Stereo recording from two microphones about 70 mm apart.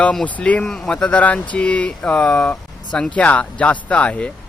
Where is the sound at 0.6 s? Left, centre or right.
Centre.